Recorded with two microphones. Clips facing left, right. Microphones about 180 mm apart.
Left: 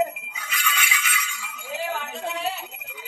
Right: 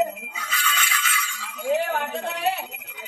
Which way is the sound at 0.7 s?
10° left (ahead or behind).